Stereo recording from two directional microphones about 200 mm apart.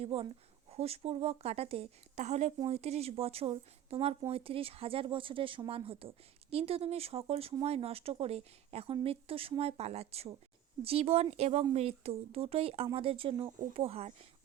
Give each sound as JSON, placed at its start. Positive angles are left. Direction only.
{"t": 0.0, "sound": "speech", "side_deg": -30}